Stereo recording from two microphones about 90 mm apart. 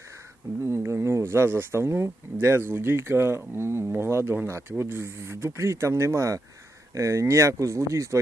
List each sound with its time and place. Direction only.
0.6 s speech: 30° right (ahead or behind)